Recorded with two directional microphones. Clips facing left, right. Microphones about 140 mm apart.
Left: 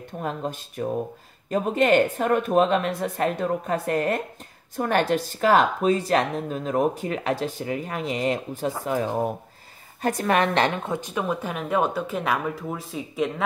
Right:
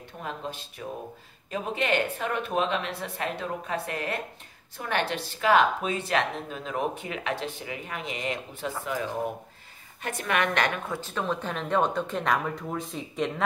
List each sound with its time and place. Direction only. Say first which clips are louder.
0.2 s speech: left 6 dB; 45° left (ahead or behind)
10.0 s a woman's voice: left 6 dB; 35° left (ahead or behind); by 13.3 s centre (ahead or behind)